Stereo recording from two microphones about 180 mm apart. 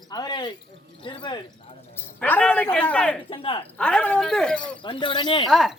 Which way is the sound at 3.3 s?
30° left (ahead or behind).